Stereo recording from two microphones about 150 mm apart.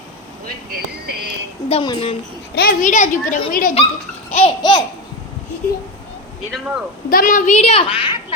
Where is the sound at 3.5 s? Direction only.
70° left (ahead or behind).